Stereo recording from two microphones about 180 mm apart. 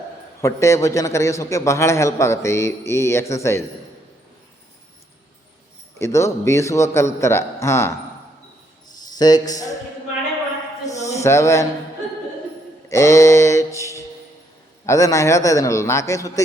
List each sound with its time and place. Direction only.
0.4 s a man's voice: 15° left (ahead or behind)
6.0 s a man's voice: 15° left (ahead or behind)
9.1 s a man's voice: 20° left (ahead or behind)
10.8 s a sound: 20° left (ahead or behind)
11.2 s a man's voice: 15° left (ahead or behind)
12.9 s a man's voice: 15° left (ahead or behind)